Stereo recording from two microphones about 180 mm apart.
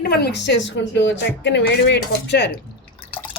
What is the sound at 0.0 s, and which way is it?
Speech, 60° left (ahead or behind).